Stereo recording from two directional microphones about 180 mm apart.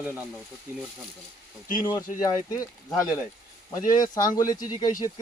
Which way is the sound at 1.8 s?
25° left (ahead or behind).